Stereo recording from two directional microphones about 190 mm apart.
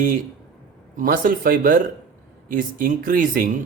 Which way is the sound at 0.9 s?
45° right (ahead or behind).